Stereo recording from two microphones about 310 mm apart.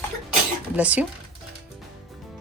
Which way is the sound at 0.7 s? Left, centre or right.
Centre.